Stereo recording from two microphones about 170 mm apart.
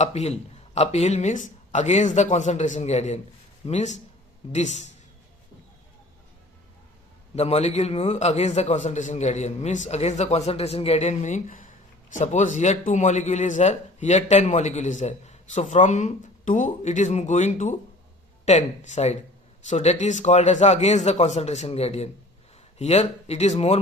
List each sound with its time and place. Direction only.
0.0 s a man's voice: 40° left (ahead or behind)
7.3 s a man's voice: 40° left (ahead or behind)